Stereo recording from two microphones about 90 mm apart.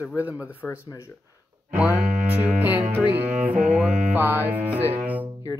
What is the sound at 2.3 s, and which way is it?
Music, 20° right (ahead or behind).